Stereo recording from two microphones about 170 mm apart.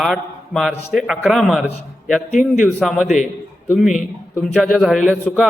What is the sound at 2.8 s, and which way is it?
A man's voice, centre (ahead or behind).